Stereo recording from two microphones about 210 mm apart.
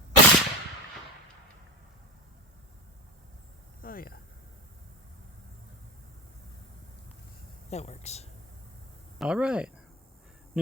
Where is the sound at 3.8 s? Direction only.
45° left (ahead or behind).